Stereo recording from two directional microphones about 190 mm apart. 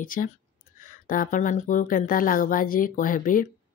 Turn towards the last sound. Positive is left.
turn(degrees=45)  # may be behind; listen again after turning